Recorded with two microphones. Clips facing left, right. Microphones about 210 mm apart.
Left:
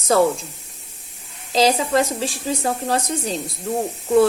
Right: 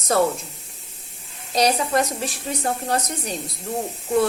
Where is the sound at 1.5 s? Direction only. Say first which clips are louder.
Left 3 dB; 25° left (ahead or behind).